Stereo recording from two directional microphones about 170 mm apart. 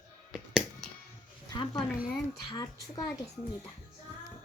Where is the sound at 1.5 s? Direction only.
25° left (ahead or behind).